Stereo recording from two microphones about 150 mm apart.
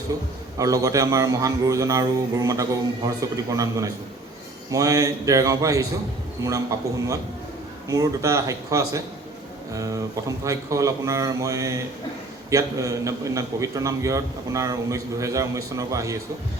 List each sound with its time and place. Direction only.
0.6 s a man's voice: 25° right (ahead or behind)